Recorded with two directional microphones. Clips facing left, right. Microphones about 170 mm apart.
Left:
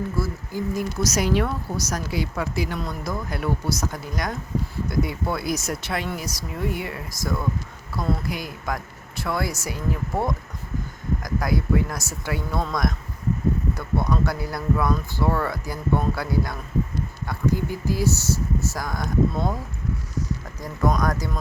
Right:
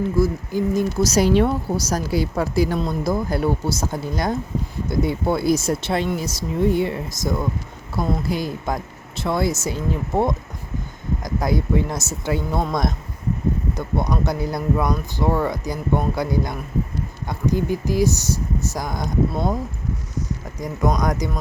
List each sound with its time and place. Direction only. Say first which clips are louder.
0.2 s speech: right 7 dB; 20° right (ahead or behind)
20.8 s speech: right 2 dB; 15° right (ahead or behind)